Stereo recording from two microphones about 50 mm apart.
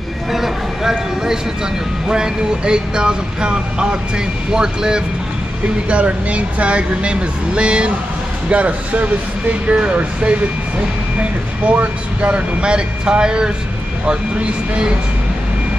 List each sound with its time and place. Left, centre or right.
0.3 s a sound: centre
2.0 s speech: centre
5.9 s speech: right